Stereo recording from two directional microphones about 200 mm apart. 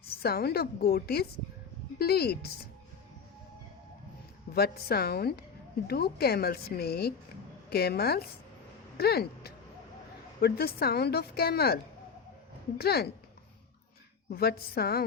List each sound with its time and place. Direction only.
0.1 s a woman's voice: 50° left (ahead or behind)
4.5 s a woman's voice: 50° left (ahead or behind)
12.8 s a woman's voice: 50° left (ahead or behind)
14.3 s a woman's voice: 50° left (ahead or behind)